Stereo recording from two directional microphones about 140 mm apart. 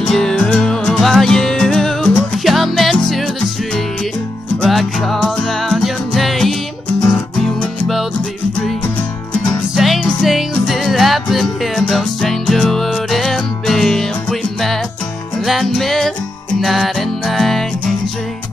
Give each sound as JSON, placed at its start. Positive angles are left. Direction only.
{"t": 0.0, "sound": "music", "side_deg": 5}
{"t": 9.8, "sound": "music", "side_deg": 0}
{"t": 15.4, "sound": "music", "side_deg": 0}